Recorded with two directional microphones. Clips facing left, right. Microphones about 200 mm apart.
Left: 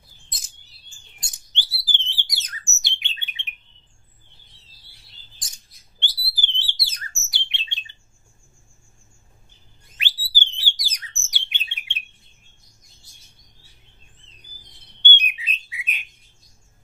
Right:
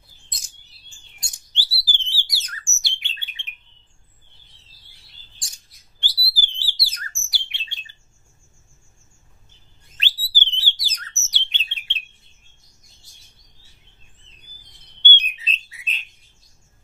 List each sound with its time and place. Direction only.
1.2 s bird: 20° left (ahead or behind)
5.9 s bird: 25° left (ahead or behind)
9.9 s bird: 10° left (ahead or behind)
15.0 s bird: 15° left (ahead or behind)